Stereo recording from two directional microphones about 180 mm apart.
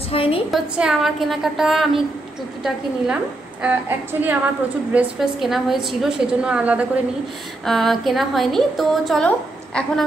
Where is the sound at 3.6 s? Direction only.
10° right (ahead or behind).